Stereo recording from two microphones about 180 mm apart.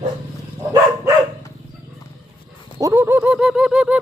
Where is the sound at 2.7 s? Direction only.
15° right (ahead or behind).